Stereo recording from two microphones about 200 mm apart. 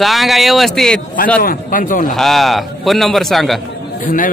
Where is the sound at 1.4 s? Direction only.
45° left (ahead or behind).